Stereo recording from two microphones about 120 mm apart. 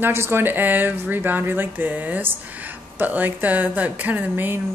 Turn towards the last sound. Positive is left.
turn(degrees=-15)  # may be behind; listen again after turning